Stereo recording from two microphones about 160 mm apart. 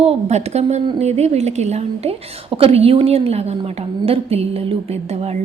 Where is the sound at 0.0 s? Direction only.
40° right (ahead or behind).